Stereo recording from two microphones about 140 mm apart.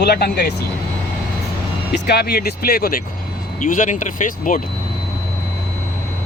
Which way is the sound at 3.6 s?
70° left (ahead or behind).